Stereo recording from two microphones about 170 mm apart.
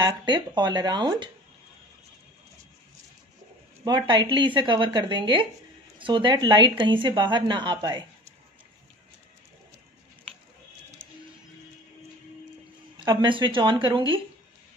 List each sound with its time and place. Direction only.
0.0 s speech: 25° right (ahead or behind)
3.8 s speech: 25° right (ahead or behind)
13.0 s speech: 30° right (ahead or behind)